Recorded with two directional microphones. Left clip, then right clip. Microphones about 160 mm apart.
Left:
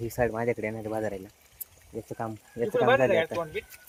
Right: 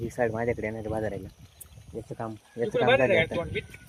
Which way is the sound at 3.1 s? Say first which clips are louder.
Right 1 dB; 30° left (ahead or behind).